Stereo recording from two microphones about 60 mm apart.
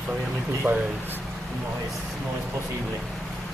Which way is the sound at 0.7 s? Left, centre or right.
Right.